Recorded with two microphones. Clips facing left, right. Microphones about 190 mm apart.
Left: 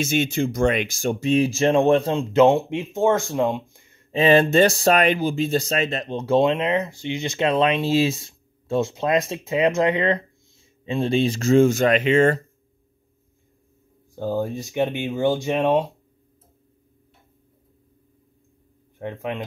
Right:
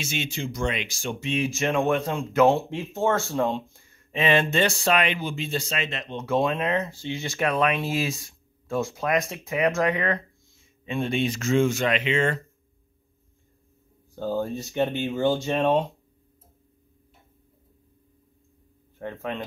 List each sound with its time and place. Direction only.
0.0 s speech: 50° left (ahead or behind); by 4.0 s 20° left (ahead or behind)
4.1 s speech: 35° left (ahead or behind)
14.1 s speech: 15° left (ahead or behind)
18.9 s speech: 15° left (ahead or behind)